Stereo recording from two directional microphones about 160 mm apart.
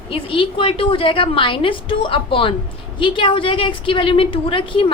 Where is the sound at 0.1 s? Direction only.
35° left (ahead or behind).